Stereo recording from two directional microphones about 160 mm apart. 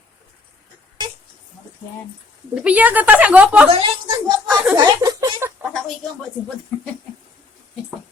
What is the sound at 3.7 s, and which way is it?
A woman's voice, 35° right (ahead or behind).